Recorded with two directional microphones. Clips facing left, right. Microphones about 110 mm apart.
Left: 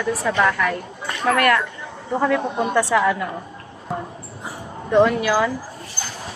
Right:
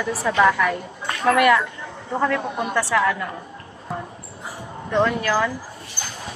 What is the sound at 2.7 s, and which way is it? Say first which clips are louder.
Speech: left 2 dB; 15° left (ahead or behind).